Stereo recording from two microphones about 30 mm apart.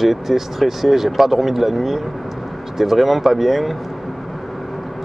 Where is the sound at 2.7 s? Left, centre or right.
Centre.